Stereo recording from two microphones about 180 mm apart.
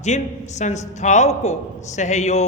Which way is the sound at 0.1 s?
40° left (ahead or behind).